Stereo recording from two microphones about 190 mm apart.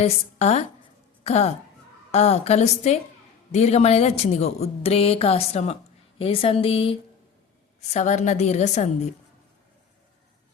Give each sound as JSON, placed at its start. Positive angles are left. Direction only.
{"t": 0.0, "sound": "speech", "side_deg": 35}
{"t": 7.9, "sound": "speech", "side_deg": 40}